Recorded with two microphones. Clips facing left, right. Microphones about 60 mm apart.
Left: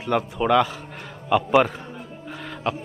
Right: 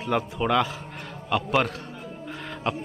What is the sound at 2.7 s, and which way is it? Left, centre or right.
Speech, centre.